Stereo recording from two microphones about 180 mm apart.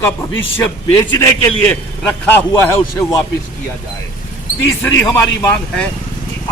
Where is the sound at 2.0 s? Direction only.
10° left (ahead or behind).